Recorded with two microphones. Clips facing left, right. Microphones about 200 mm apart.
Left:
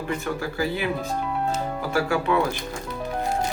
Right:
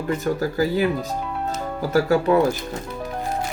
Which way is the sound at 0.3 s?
40° right (ahead or behind).